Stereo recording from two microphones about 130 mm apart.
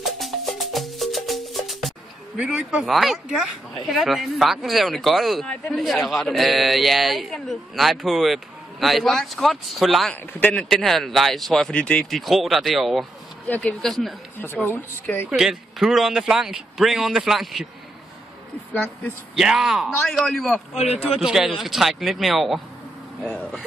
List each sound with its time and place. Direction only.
0.0 s music: centre (ahead or behind)
10.4 s speech: 5° left (ahead or behind)
14.4 s speech: 15° left (ahead or behind)
15.2 s speech: 5° right (ahead or behind)
18.7 s speech: 10° left (ahead or behind)
19.3 s speech: 5° right (ahead or behind)
20.7 s speech: 55° left (ahead or behind)
21.2 s speech: 5° right (ahead or behind)